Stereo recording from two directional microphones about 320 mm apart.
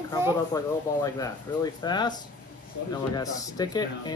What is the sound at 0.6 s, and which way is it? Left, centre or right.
Speech, centre.